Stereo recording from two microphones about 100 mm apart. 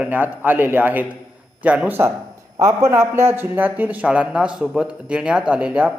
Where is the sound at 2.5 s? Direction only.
30° right (ahead or behind); by 5.9 s 10° right (ahead or behind).